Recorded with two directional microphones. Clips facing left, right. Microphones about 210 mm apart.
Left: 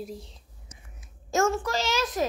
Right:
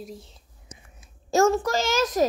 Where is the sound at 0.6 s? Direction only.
30° right (ahead or behind).